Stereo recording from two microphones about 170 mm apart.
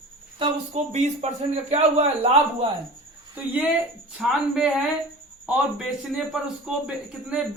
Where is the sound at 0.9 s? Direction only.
40° right (ahead or behind).